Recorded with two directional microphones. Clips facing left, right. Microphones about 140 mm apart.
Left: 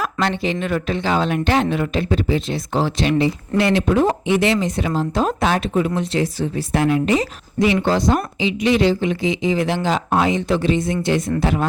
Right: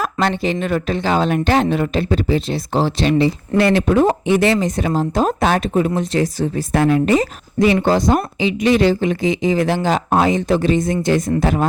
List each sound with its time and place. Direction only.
0.0 s speech: 40° right (ahead or behind)
4.1 s speech: 45° right (ahead or behind)